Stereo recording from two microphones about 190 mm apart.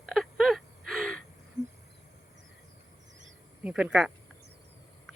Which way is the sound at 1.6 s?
20° right (ahead or behind).